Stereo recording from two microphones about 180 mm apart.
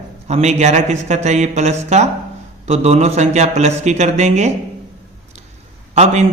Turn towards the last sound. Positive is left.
turn(degrees=-35)  # may be behind; listen again after turning